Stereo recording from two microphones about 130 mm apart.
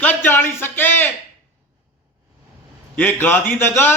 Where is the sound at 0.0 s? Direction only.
15° left (ahead or behind).